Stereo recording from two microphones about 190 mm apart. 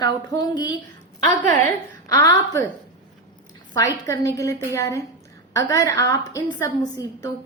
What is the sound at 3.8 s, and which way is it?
A woman's voice, 15° left (ahead or behind).